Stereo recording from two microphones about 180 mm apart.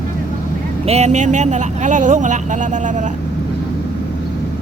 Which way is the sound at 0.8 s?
35° right (ahead or behind).